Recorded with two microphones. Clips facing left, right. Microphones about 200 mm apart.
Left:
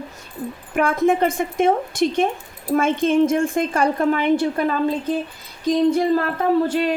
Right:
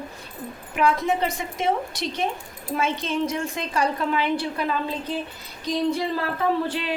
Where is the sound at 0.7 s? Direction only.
50° left (ahead or behind).